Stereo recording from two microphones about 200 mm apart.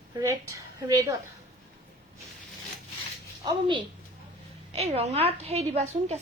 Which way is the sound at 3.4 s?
25° right (ahead or behind).